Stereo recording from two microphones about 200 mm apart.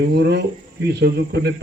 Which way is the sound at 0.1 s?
60° right (ahead or behind).